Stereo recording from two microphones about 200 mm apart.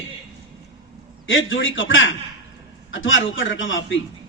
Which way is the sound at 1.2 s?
70° left (ahead or behind).